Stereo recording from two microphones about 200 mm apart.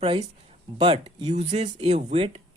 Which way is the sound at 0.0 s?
30° right (ahead or behind).